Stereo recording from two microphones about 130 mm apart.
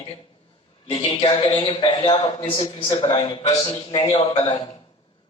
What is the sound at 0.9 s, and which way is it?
A man's voice, 40° left (ahead or behind).